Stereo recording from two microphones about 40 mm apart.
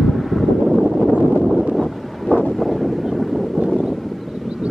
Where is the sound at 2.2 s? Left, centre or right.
Centre.